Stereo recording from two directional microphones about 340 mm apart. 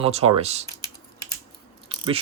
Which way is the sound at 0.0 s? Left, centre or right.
Centre.